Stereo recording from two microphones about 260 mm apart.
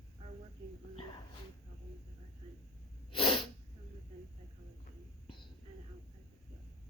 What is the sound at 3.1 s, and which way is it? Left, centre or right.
Sneeze, left.